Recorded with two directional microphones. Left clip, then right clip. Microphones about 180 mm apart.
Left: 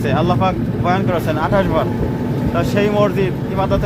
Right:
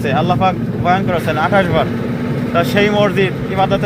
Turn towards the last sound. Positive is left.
turn(degrees=10)  # may be behind; listen again after turning